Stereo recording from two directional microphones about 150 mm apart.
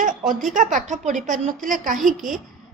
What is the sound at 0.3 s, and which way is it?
A woman's voice, 60° right (ahead or behind).